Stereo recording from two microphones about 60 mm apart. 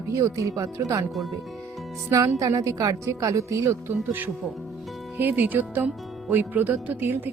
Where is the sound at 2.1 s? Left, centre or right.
Right.